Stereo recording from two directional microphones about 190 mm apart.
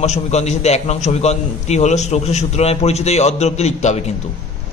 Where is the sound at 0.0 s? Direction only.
35° left (ahead or behind).